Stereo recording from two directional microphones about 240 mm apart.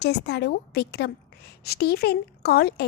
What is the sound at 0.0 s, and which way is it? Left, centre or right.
A woman's voice, left.